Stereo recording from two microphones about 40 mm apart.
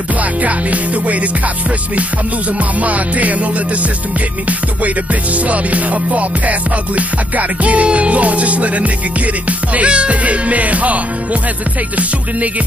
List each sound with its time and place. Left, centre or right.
0.2 s music: right
2.8 s music: right